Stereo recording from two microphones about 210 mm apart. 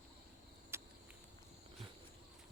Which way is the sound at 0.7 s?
10° right (ahead or behind).